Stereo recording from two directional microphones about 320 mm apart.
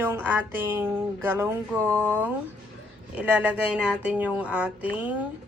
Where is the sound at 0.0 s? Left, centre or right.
Centre.